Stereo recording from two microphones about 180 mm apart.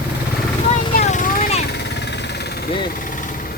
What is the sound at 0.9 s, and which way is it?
Vehicle, 45° left (ahead or behind).